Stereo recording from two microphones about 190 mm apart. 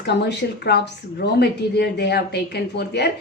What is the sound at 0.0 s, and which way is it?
Speech, 60° left (ahead or behind).